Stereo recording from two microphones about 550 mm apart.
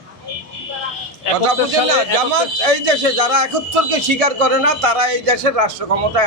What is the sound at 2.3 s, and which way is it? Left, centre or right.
Speech, right.